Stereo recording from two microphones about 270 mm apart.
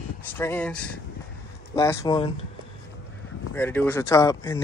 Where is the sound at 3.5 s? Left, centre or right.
Centre.